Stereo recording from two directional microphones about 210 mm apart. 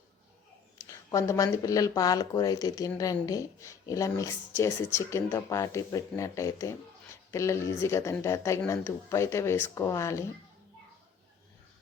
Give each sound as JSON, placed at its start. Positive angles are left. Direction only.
{"t": 0.8, "sound": "speech", "side_deg": 15}